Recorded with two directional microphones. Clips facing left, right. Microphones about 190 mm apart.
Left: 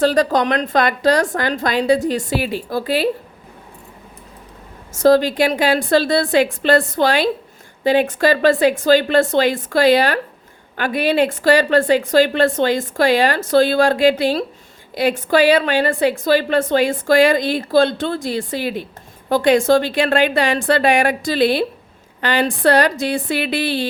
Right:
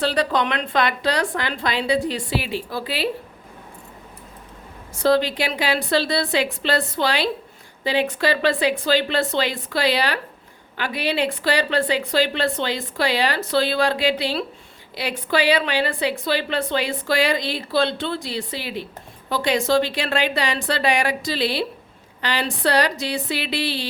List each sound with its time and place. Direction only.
0.0 s a woman's voice: 45° left (ahead or behind)
4.9 s a woman's voice: 45° left (ahead or behind)